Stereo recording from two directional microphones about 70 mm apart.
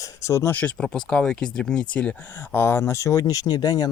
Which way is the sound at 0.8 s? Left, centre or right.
Centre.